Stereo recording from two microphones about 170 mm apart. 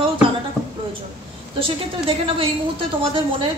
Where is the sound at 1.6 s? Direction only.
30° right (ahead or behind).